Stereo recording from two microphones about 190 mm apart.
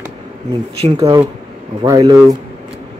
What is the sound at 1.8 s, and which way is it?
Speech, 20° right (ahead or behind).